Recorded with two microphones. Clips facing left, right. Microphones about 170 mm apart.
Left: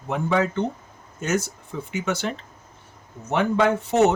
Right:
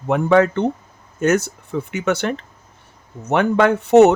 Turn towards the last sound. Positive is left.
turn(degrees=-65)  # may be behind; listen again after turning